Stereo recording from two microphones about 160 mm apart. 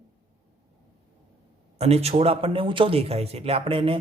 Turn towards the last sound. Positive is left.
turn(degrees=-35)  # may be behind; listen again after turning